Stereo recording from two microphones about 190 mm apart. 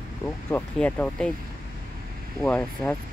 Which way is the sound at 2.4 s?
5° left (ahead or behind).